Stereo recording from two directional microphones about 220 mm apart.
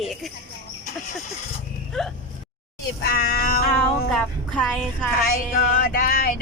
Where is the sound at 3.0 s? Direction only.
45° left (ahead or behind).